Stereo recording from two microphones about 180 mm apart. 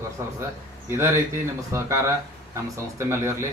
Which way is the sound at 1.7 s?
15° right (ahead or behind).